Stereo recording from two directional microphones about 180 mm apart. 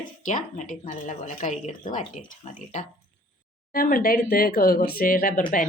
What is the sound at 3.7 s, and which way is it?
A woman's voice, 50° left (ahead or behind).